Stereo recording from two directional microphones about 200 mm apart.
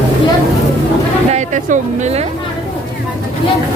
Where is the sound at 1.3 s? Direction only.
35° right (ahead or behind).